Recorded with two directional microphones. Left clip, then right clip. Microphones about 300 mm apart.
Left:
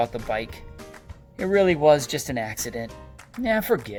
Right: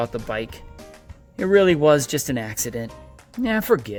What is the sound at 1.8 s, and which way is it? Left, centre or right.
Speech, right.